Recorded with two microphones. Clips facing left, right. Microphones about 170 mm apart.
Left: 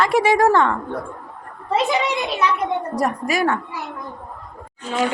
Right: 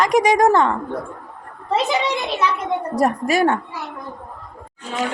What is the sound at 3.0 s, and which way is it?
Speech, 25° right (ahead or behind).